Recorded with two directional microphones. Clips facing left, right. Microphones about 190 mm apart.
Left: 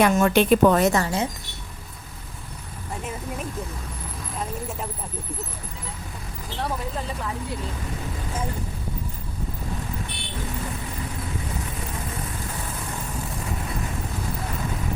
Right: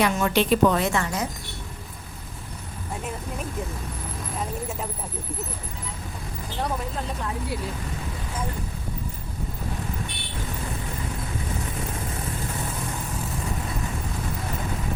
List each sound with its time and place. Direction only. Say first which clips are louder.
0.0 s a woman's voice: left 4 dB; 50° left (ahead or behind); by 1.3 s 30° left (ahead or behind)
2.9 s speech: left 1 dB; centre (ahead or behind)
6.6 s speech: even; centre (ahead or behind)